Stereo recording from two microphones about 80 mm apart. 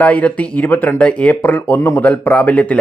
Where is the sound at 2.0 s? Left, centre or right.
Centre.